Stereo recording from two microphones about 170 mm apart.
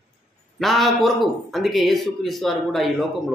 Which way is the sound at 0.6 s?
Centre (ahead or behind).